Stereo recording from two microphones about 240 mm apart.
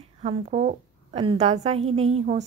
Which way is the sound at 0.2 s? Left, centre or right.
Right.